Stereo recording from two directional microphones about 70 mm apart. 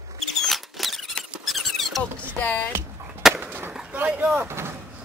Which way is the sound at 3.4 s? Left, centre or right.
Right.